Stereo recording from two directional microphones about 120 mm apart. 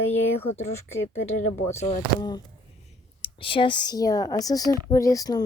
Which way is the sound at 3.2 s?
45° left (ahead or behind).